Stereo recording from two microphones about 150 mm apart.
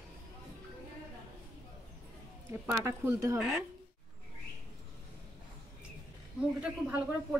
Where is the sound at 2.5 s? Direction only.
15° right (ahead or behind).